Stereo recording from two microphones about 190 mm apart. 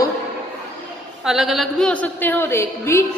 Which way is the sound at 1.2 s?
Centre (ahead or behind).